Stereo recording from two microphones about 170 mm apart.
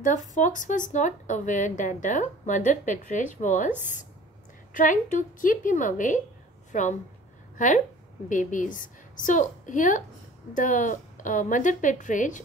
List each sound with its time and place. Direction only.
0.0 s speech: 50° left (ahead or behind)
4.7 s a woman's voice: 50° left (ahead or behind)